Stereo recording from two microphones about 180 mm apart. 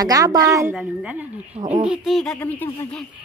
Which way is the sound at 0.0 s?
20° right (ahead or behind).